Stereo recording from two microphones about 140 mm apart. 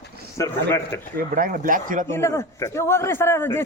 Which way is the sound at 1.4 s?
80° right.